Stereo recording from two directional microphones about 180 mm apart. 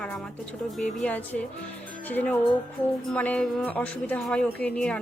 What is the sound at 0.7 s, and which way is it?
A woman's voice, 5° left (ahead or behind).